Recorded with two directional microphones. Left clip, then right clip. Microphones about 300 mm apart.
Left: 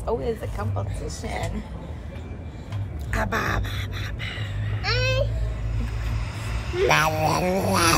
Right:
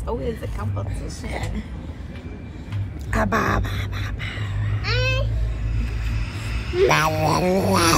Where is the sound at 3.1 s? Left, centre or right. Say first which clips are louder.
Right 4 dB; centre.